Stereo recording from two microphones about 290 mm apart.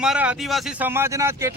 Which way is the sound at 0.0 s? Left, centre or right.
Centre.